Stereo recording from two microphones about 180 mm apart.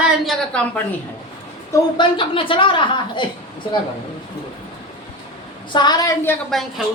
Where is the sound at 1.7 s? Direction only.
25° left (ahead or behind).